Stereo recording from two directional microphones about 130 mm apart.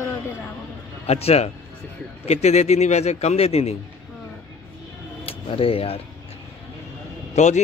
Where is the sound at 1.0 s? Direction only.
50° left (ahead or behind).